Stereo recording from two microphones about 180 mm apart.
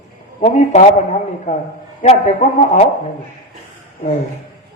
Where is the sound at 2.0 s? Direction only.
40° left (ahead or behind).